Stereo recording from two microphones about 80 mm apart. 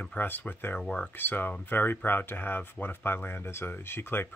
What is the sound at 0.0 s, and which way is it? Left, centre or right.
Speech, left.